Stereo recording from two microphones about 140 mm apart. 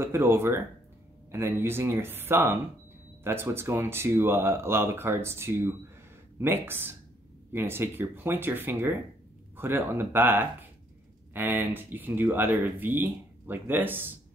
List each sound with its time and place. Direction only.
0.0 s speech: 20° right (ahead or behind)